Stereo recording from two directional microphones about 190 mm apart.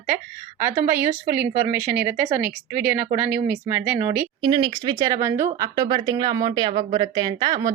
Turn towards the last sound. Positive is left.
turn(degrees=-20)  # may be behind; listen again after turning